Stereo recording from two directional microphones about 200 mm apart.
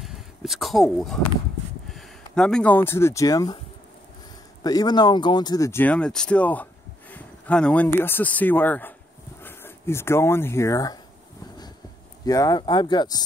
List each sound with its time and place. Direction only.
0.0 s a sound: centre (ahead or behind)
1.9 s speech: centre (ahead or behind)
4.6 s speech: 20° left (ahead or behind)
12.3 s speech: 20° left (ahead or behind)